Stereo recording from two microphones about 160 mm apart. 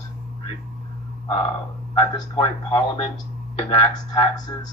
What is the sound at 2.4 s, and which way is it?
A man's voice, 30° left (ahead or behind).